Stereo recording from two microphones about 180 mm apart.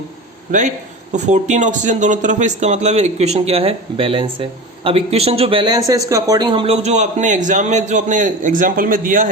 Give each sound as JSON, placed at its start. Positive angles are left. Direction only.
{"t": 1.1, "sound": "speech", "side_deg": -40}